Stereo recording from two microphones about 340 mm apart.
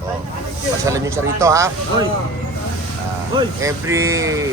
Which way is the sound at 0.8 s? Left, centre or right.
Centre.